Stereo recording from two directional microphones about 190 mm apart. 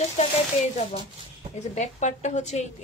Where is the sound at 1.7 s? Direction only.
35° left (ahead or behind).